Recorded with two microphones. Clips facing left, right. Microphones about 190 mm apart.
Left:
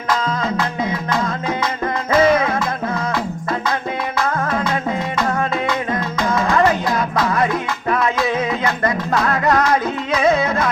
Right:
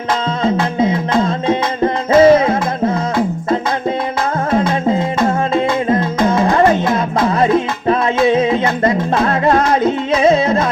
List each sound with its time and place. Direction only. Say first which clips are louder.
0.1 s music: right 4 dB; 25° right (ahead or behind)
4.9 s music: right 6 dB; 25° right (ahead or behind)